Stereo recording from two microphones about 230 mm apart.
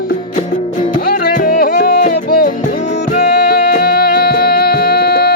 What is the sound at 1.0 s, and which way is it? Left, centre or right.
Music, left.